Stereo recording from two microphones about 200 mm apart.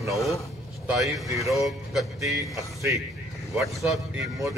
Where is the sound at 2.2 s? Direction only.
15° right (ahead or behind).